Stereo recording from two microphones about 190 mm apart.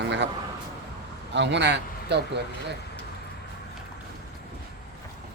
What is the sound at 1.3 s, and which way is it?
Speech, 65° right (ahead or behind).